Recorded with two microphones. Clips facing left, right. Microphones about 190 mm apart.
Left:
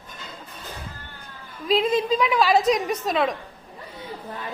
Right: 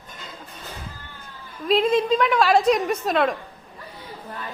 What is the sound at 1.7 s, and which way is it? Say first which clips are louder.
A woman's voice: right 2 dB; centre (ahead or behind).